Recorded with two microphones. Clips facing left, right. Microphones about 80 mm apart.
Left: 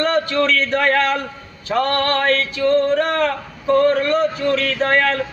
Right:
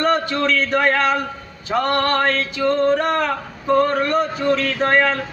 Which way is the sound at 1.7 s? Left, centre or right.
Centre.